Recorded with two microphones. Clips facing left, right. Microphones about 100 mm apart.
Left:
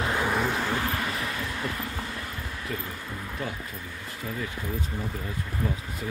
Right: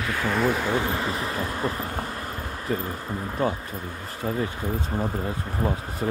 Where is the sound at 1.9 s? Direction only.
45° right (ahead or behind).